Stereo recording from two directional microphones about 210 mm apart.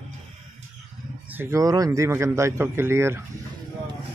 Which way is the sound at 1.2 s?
10° right (ahead or behind).